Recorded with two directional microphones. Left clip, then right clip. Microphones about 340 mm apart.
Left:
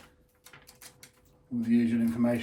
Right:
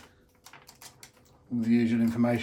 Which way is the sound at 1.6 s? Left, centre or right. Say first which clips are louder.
Right 1 dB; right.